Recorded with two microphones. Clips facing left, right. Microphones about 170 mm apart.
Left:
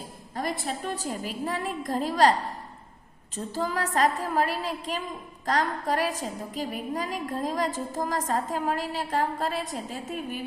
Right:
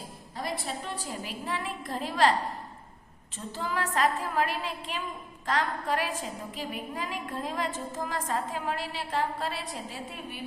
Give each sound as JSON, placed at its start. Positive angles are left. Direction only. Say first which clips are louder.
{"t": 0.3, "sound": "a woman's voice", "louder": "left 4 dB", "side_deg": 45}
{"t": 3.3, "sound": "a woman's voice", "louder": "left 4 dB", "side_deg": 40}